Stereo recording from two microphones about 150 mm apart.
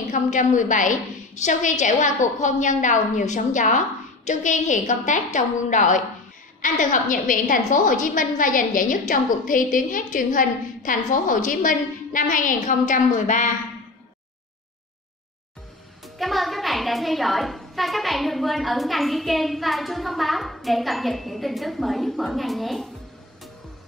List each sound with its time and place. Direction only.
0.1 s a woman's voice: 55° left (ahead or behind)
16.2 s a woman's voice: centre (ahead or behind)